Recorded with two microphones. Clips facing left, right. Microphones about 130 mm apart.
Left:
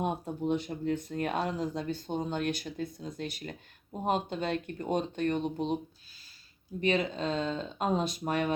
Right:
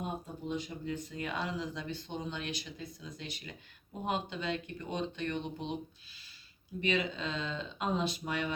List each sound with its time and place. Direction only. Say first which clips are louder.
0.0 s speech: left 7 dB; 65° left (ahead or behind); by 5.7 s 45° left (ahead or behind)
6.8 s speech: left 4 dB; 40° left (ahead or behind)